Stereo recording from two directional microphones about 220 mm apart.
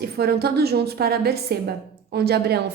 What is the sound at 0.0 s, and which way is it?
A woman's voice, 45° right (ahead or behind).